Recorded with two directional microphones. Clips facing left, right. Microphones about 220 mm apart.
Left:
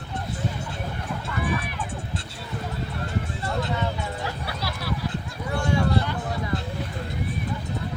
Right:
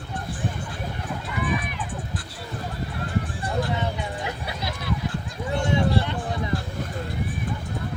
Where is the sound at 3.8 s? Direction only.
20° right (ahead or behind).